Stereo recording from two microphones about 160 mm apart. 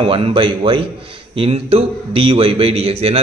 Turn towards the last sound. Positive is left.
turn(degrees=-40)  # may be behind; listen again after turning